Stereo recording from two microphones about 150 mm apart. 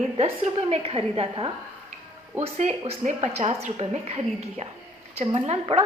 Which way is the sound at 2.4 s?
50° right (ahead or behind).